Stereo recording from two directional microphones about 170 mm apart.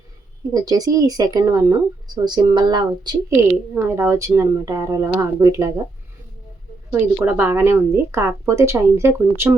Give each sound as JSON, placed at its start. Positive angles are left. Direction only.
{"t": 0.5, "sound": "speech", "side_deg": -20}
{"t": 3.5, "sound": "a woman's voice", "side_deg": -15}
{"t": 6.9, "sound": "a woman's voice", "side_deg": -15}